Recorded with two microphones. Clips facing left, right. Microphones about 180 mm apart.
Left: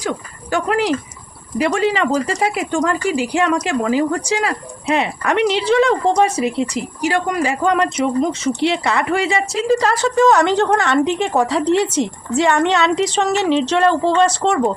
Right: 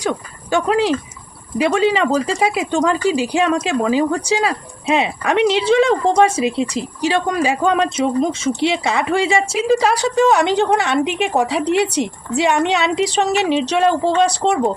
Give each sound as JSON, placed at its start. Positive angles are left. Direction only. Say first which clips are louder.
{"t": 0.5, "sound": "a woman's voice", "louder": "right 2 dB", "side_deg": -25}